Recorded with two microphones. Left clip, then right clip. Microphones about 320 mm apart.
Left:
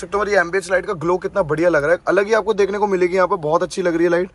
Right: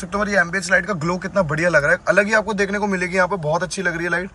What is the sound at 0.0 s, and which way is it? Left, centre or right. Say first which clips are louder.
A man's voice: left 2 dB; centre.